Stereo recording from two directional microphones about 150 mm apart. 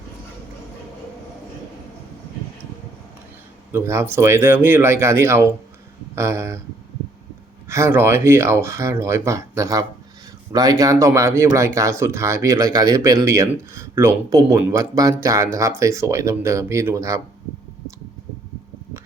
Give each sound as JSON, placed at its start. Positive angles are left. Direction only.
{"t": 3.7, "sound": "speech", "side_deg": -20}
{"t": 7.7, "sound": "speech", "side_deg": -15}